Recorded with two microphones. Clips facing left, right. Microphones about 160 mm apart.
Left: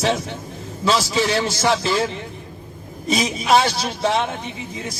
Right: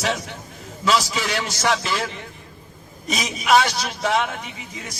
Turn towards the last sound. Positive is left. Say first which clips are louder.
# left 6 dB
turn(degrees=30)  # may be behind; listen again after turning